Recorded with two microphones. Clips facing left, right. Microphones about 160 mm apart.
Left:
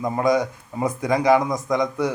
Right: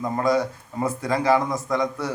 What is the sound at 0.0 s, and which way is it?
Speech, 15° left (ahead or behind).